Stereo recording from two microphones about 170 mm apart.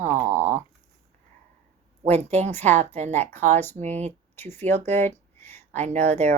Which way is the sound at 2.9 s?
40° right (ahead or behind).